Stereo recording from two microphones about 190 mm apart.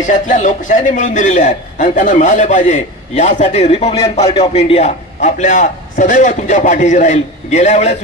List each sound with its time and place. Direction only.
0.3 s a man's voice: 40° left (ahead or behind)